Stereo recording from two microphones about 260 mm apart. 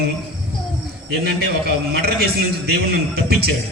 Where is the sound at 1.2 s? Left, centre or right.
Right.